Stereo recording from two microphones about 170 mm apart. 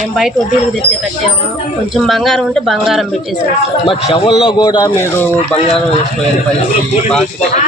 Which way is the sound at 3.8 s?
35° left (ahead or behind).